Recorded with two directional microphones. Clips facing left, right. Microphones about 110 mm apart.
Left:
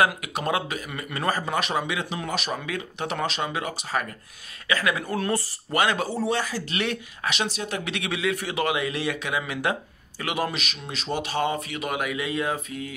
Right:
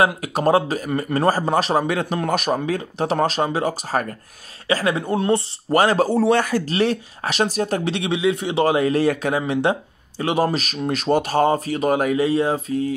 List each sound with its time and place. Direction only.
0.0 s a man's voice: 35° right (ahead or behind)
5.7 s a man's voice: 35° right (ahead or behind)
6.1 s speech: 60° right (ahead or behind)
6.7 s a man's voice: 35° right (ahead or behind)
9.5 s a man's voice: 25° right (ahead or behind)